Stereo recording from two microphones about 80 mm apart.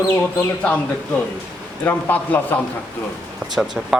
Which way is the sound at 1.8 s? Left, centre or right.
Left.